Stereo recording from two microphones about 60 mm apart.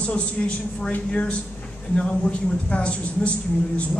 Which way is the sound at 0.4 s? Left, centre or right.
Centre.